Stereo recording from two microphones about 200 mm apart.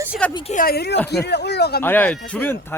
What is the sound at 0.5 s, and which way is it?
A woman's voice, 50° left (ahead or behind).